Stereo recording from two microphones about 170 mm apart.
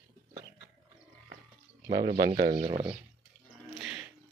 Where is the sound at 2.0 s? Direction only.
25° right (ahead or behind).